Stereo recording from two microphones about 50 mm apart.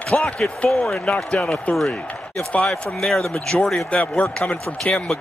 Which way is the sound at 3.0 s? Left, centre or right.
Centre.